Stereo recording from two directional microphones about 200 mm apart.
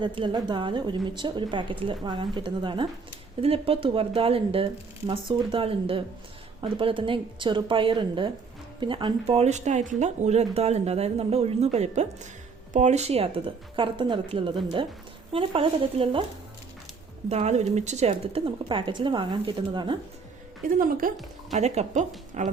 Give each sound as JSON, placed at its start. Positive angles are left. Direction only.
{"t": 0.0, "sound": "a woman's voice", "side_deg": -25}
{"t": 17.2, "sound": "a woman's voice", "side_deg": -35}
{"t": 20.7, "sound": "a woman's voice", "side_deg": -45}